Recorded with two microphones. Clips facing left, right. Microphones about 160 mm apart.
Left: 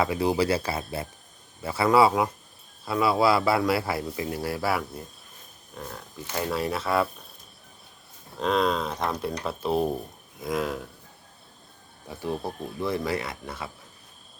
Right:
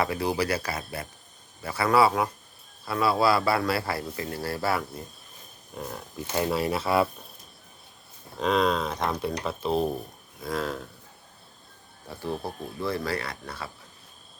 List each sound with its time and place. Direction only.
0.0 s speech: 20° left (ahead or behind)
5.7 s speech: 10° right (ahead or behind)
8.4 s speech: centre (ahead or behind)
12.0 s speech: 15° left (ahead or behind)